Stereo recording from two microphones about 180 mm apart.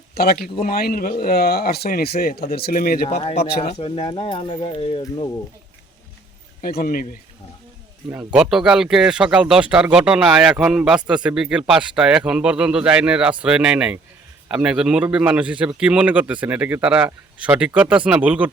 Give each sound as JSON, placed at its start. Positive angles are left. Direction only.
{"t": 0.1, "sound": "speech", "side_deg": 55}
{"t": 3.1, "sound": "speech", "side_deg": 35}
{"t": 6.6, "sound": "speech", "side_deg": 55}
{"t": 8.1, "sound": "a man's voice", "side_deg": -5}